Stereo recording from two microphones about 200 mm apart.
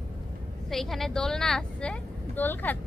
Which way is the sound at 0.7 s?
Centre (ahead or behind).